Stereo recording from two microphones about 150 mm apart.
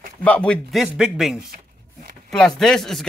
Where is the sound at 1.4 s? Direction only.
70° right (ahead or behind).